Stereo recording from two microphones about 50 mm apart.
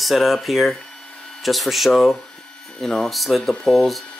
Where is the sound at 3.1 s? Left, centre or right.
Centre.